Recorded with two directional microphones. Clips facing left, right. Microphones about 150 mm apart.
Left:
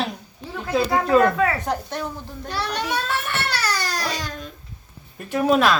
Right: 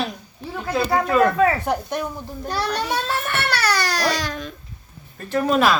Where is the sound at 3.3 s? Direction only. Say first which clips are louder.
Right 3 dB; 60° right (ahead or behind); by 4.5 s 80° right.